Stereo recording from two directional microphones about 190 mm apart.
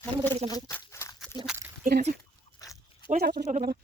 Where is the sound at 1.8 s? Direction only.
55° right (ahead or behind).